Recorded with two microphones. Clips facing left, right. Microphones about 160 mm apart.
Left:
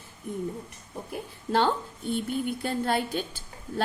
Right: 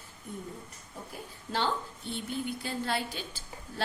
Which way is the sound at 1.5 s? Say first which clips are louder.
Left 7 dB; 55° left (ahead or behind).